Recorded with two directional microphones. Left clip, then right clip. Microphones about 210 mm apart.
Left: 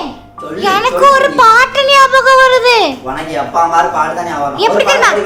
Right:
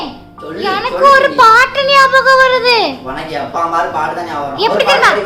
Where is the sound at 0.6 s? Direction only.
30° left (ahead or behind).